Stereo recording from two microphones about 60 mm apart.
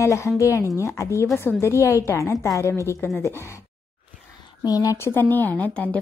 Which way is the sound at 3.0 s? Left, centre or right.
Left.